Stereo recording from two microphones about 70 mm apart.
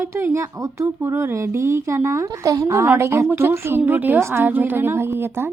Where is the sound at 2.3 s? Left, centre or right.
Right.